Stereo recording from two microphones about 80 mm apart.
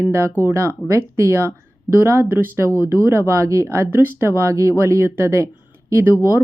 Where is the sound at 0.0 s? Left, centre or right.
Right.